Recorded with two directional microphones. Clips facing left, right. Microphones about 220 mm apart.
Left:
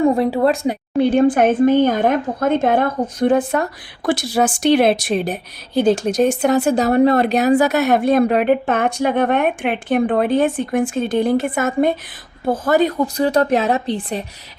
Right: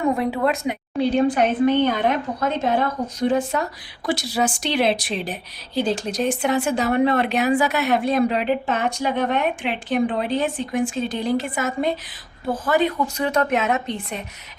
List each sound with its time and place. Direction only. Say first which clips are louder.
0.0 s speech: left 6 dB; 30° left (ahead or behind)
0.9 s speech: left 5 dB; 50° left (ahead or behind)
12.5 s speech: left 4 dB; 40° left (ahead or behind)